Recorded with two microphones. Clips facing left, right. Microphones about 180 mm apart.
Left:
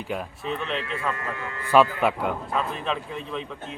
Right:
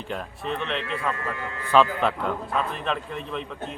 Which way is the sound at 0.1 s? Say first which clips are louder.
Even; 5° left (ahead or behind).